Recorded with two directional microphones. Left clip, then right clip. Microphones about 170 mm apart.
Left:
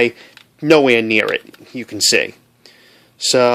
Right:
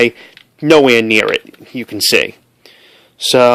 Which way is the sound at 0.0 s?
20° right (ahead or behind).